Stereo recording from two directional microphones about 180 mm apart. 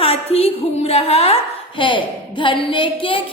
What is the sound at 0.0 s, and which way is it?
A woman's voice, 35° left (ahead or behind).